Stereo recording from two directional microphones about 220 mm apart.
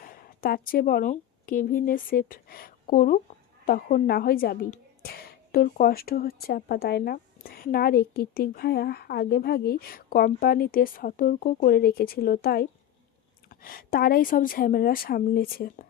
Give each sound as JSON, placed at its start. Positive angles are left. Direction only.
{"t": 0.0, "sound": "a woman's voice", "side_deg": 40}